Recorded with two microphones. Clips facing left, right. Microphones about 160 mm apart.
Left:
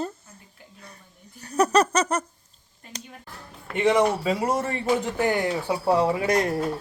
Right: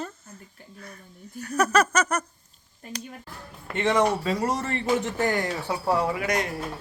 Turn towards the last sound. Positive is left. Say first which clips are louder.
# left 4 dB
turn(degrees=35)  # may be behind; listen again after turning